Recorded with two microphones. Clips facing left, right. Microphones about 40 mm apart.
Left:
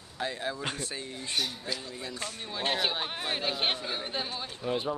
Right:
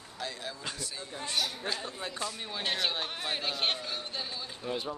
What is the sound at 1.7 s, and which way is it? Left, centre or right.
Speech, right.